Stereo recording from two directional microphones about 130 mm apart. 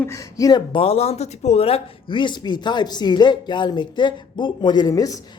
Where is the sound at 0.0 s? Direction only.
25° left (ahead or behind).